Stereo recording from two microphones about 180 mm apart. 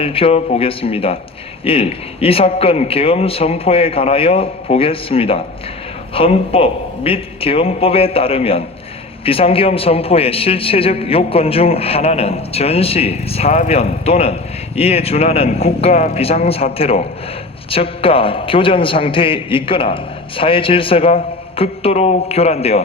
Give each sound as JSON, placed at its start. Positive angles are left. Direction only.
{"t": 0.0, "sound": "a man's voice", "side_deg": 30}